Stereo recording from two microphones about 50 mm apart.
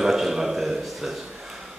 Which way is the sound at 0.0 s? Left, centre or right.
Centre.